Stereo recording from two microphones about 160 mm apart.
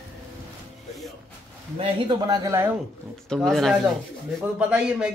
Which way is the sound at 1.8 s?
30° right (ahead or behind).